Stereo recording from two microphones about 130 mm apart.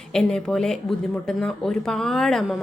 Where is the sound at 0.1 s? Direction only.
5° left (ahead or behind).